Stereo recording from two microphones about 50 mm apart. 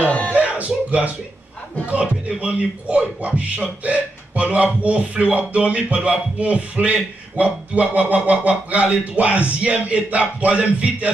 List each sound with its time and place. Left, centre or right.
0.3 s music: right
1.9 s speech: right